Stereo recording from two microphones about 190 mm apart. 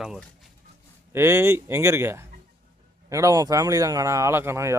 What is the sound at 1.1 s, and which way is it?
Speech, 15° right (ahead or behind).